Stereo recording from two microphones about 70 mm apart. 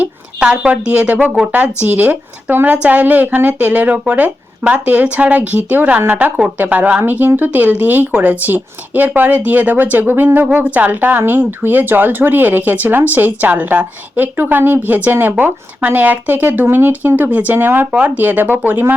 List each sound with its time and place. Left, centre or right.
0.0 s speech: centre